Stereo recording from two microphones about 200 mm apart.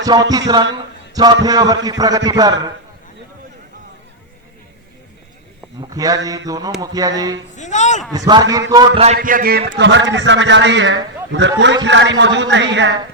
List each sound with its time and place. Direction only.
0.0 s a man's voice: 20° right (ahead or behind)
1.1 s a sound: 20° right (ahead or behind)
1.5 s a man's voice: 20° right (ahead or behind)
5.8 s speech: 20° right (ahead or behind)
7.5 s speech: 35° left (ahead or behind)
8.1 s a man's voice: 20° right (ahead or behind)
9.1 s a man's voice: 45° right (ahead or behind); by 13.0 s 65° right (ahead or behind)